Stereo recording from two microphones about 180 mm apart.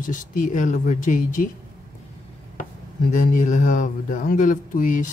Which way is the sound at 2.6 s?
45° left (ahead or behind).